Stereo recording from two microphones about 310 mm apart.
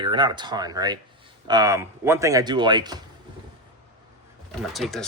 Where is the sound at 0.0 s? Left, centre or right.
Centre.